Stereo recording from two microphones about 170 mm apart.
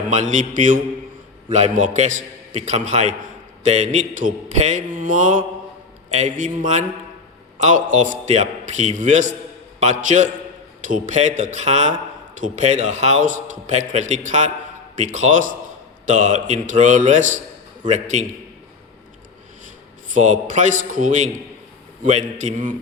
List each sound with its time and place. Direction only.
0.1 s a man's voice: 45° right (ahead or behind)
20.1 s a man's voice: 50° right (ahead or behind)